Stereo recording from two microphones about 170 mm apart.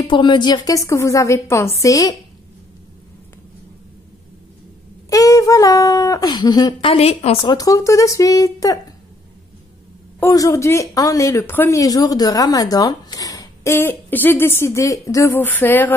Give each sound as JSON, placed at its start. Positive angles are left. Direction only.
{"t": 0.1, "sound": "speech", "side_deg": 25}
{"t": 5.1, "sound": "speech", "side_deg": 20}
{"t": 10.2, "sound": "speech", "side_deg": 20}